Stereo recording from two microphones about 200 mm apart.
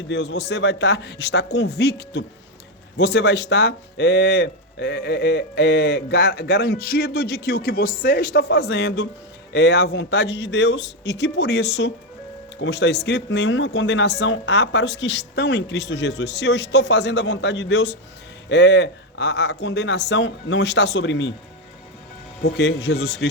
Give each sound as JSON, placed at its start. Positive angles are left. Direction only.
{"t": 0.1, "sound": "speech", "side_deg": 60}
{"t": 22.4, "sound": "speech", "side_deg": 60}